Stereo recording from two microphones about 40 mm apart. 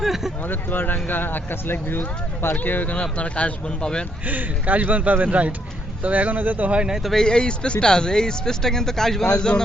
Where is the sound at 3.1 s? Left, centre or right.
Left.